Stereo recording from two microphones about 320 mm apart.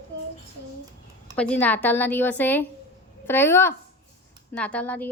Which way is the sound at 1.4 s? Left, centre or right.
Centre.